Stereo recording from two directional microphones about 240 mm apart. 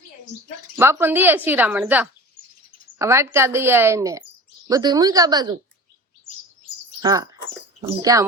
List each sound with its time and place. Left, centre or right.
0.8 s speech: centre
7.0 s speech: centre